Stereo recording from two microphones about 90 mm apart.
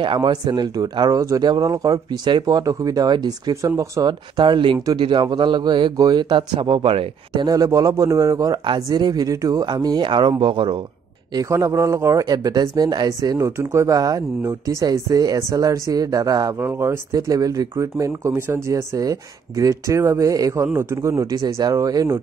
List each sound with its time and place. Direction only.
0.0 s speech: 60° right (ahead or behind); by 4.1 s 40° right (ahead or behind)
4.4 s speech: 60° right (ahead or behind); by 7.1 s 80° right
7.3 s speech: 45° right (ahead or behind); by 10.8 s 65° right (ahead or behind)
11.3 s speech: 40° right (ahead or behind)
12.3 s speech: 45° right (ahead or behind)
16.5 s speech: 25° right (ahead or behind)